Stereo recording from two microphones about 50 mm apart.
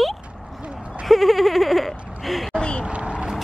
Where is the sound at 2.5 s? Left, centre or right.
Centre.